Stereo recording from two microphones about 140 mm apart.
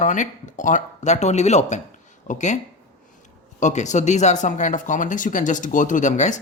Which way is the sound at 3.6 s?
60° left (ahead or behind).